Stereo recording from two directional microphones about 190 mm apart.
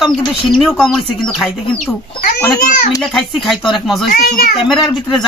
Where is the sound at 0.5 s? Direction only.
Centre (ahead or behind).